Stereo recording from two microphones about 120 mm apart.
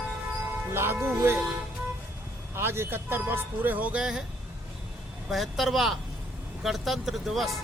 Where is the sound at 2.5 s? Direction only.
20° right (ahead or behind); by 4.3 s 5° right (ahead or behind).